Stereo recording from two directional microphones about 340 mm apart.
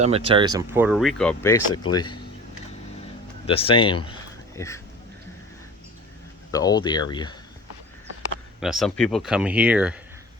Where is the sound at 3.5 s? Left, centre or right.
Centre.